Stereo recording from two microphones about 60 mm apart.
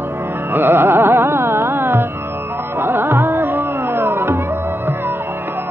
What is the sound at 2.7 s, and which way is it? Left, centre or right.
Music, right.